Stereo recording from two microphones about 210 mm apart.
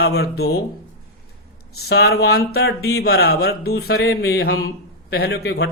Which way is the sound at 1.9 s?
50° left (ahead or behind).